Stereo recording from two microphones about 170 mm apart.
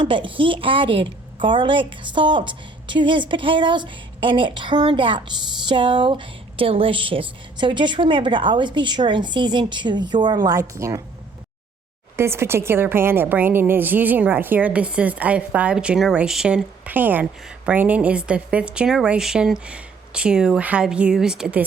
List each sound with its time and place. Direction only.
0.0 s a woman's voice: 30° right (ahead or behind)
12.1 s a woman's voice: 15° right (ahead or behind)